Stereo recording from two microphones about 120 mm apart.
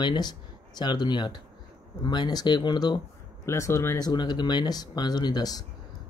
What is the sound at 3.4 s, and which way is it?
Speech, 25° left (ahead or behind).